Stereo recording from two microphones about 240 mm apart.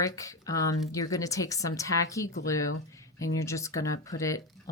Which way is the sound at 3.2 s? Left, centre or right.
Left.